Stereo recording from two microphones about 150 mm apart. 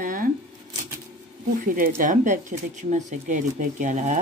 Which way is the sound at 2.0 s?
60° right (ahead or behind).